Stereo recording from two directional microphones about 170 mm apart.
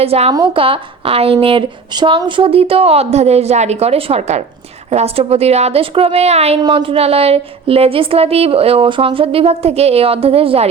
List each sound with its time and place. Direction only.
0.0 s a woman's voice: 35° right (ahead or behind)
6.6 s a woman's voice: 30° right (ahead or behind)